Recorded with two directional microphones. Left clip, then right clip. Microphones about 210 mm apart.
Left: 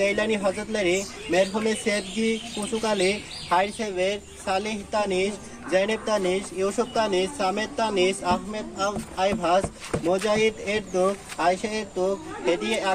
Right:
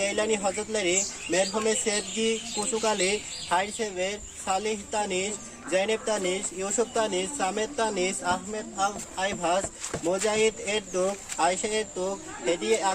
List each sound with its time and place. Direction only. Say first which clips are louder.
0.0 s speech: left 3 dB; 15° right (ahead or behind)